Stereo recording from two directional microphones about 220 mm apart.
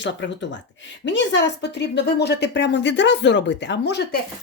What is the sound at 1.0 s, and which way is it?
Speech, 55° left (ahead or behind).